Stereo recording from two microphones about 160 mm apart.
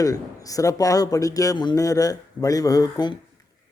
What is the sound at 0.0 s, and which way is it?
A man's voice, 20° left (ahead or behind).